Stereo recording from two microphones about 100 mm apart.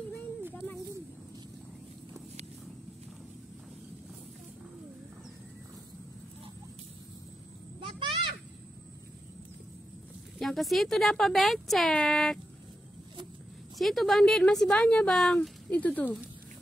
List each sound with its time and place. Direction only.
10.4 s speech: centre (ahead or behind)
13.7 s speech: centre (ahead or behind)
15.7 s speech: 15° left (ahead or behind)